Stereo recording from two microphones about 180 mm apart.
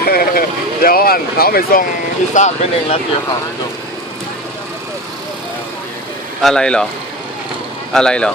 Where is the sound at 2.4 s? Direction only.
40° left (ahead or behind).